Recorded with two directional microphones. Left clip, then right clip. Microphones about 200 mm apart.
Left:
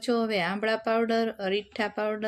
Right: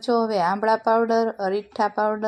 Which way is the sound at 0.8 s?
40° right (ahead or behind).